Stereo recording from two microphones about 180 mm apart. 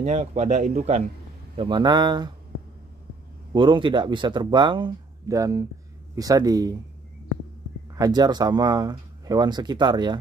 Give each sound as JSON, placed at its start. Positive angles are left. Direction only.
{"t": 0.0, "sound": "speech", "side_deg": -40}
{"t": 1.6, "sound": "speech", "side_deg": -25}
{"t": 3.5, "sound": "speech", "side_deg": -25}
{"t": 7.9, "sound": "speech", "side_deg": -20}